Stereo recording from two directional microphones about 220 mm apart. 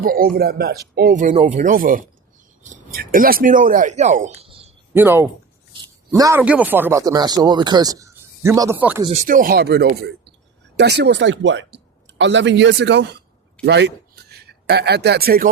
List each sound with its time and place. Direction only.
0.0 s speech: 40° right (ahead or behind)
4.9 s speech: 10° right (ahead or behind)
9.0 s speech: 25° right (ahead or behind)
9.2 s a man's voice: 40° right (ahead or behind)